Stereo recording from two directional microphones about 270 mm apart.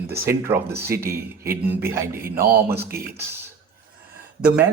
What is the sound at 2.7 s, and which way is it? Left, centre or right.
Speech, right.